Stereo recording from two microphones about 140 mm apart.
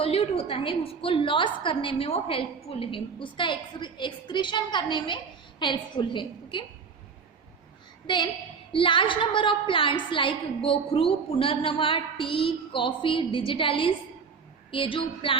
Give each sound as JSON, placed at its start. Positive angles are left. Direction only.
{"t": 0.0, "sound": "a woman's voice", "side_deg": 45}
{"t": 8.0, "sound": "a woman's voice", "side_deg": 35}